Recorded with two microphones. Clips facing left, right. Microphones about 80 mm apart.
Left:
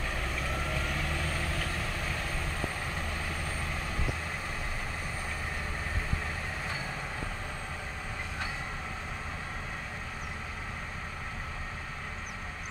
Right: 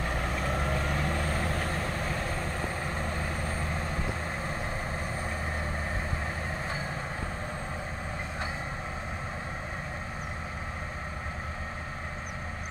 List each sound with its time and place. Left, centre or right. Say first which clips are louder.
0.0 s vehicle: right 4 dB; right